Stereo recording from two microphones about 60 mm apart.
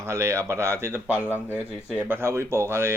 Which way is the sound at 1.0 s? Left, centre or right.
Right.